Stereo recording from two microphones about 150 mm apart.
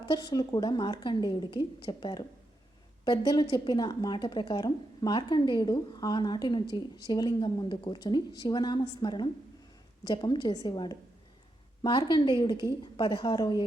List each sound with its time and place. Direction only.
0.0 s a woman's voice: 30° left (ahead or behind)